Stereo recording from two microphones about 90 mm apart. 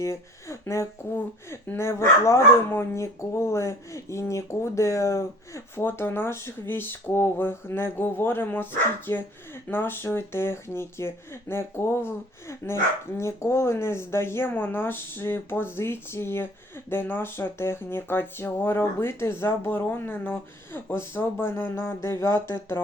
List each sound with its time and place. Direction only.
0.0 s speech: 35° left (ahead or behind)